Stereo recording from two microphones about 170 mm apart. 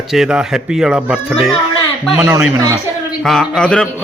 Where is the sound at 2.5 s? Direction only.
20° right (ahead or behind).